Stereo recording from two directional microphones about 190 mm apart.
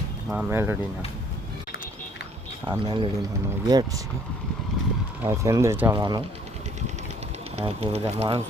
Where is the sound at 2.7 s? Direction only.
25° right (ahead or behind).